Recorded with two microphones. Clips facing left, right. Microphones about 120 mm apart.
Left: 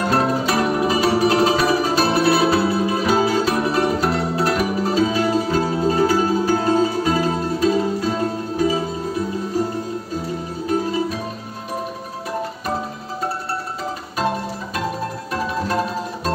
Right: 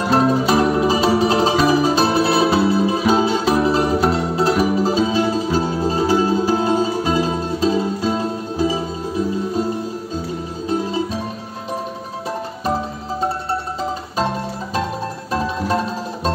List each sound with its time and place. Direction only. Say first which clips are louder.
0.1 s music: right 6 dB; 25° right (ahead or behind)
10.7 s music: even; 30° right (ahead or behind)